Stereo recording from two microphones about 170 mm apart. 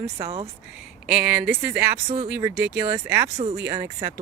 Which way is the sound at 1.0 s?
10° right (ahead or behind).